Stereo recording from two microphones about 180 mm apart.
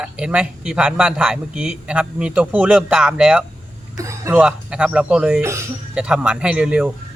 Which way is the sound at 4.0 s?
15° right (ahead or behind).